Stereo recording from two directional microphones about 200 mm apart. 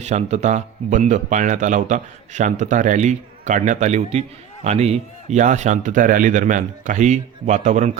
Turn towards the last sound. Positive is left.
turn(degrees=-35)  # may be behind; listen again after turning